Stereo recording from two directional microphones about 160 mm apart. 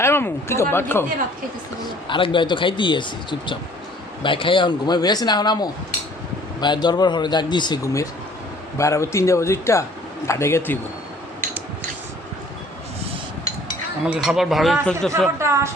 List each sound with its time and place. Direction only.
0.0 s speech: 15° left (ahead or behind)
2.0 s speech: 30° left (ahead or behind)
14.0 s speech: 5° right (ahead or behind)
15.4 s speech: 15° right (ahead or behind)